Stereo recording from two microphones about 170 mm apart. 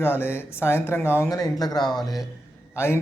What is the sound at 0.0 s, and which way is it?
A man's voice, 15° left (ahead or behind).